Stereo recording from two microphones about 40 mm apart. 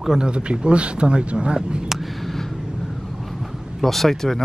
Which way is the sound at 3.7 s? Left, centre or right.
Centre.